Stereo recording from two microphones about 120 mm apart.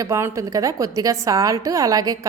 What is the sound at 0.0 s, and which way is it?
A woman's voice, 25° right (ahead or behind).